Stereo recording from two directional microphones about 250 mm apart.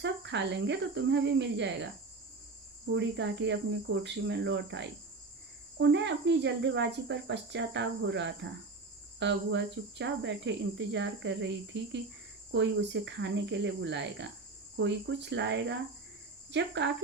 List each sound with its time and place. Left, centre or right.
0.0 s speech: right
2.9 s speech: right